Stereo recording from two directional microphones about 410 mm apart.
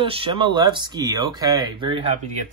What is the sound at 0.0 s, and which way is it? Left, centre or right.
A man's voice, centre.